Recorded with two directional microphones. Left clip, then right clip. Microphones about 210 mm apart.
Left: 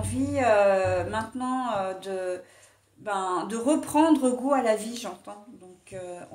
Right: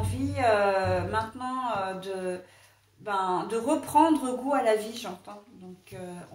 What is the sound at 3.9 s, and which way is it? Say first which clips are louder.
A woman's voice: right 1 dB; 45° left (ahead or behind).